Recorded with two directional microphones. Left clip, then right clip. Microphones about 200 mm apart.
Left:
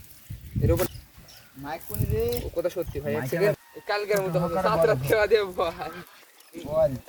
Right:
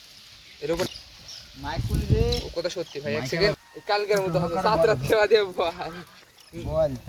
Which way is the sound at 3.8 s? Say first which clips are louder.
Right 2 dB; 30° right (ahead or behind).